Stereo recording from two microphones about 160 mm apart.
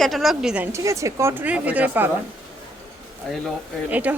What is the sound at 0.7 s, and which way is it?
A woman's voice, 20° right (ahead or behind).